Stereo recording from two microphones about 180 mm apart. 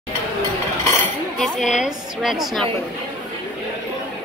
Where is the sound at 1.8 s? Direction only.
5° right (ahead or behind).